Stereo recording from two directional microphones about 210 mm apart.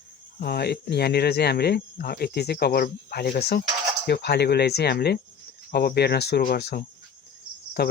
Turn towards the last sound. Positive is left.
turn(degrees=50)  # may be behind; listen again after turning